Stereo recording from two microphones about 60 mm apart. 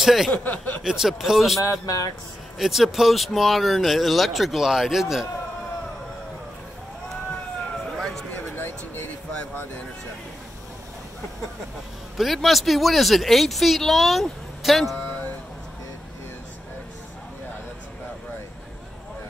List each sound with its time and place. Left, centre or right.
0.0 s speech: centre
0.3 s speech: left
0.8 s speech: centre
1.6 s speech: left
2.6 s speech: centre
7.8 s a sound: centre
8.5 s a sound: left
12.2 s speech: centre